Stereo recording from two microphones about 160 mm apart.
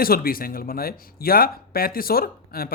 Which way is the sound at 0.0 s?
65° left (ahead or behind).